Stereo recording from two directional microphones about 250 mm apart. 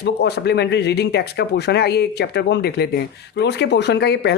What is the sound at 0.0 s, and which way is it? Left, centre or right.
Speech, left.